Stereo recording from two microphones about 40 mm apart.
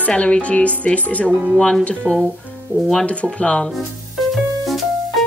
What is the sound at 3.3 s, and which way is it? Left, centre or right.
Speech, left.